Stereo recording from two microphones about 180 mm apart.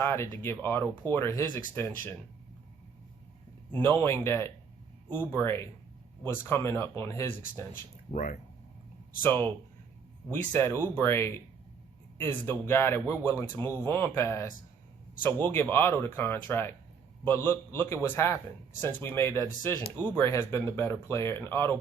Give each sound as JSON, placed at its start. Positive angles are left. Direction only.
{"t": 0.0, "sound": "speech", "side_deg": 15}
{"t": 3.7, "sound": "speech", "side_deg": 10}
{"t": 8.1, "sound": "speech", "side_deg": 45}
{"t": 9.2, "sound": "a man's voice", "side_deg": 10}